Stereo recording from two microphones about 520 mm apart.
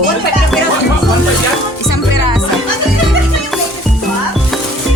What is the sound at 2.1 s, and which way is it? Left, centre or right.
Music, left.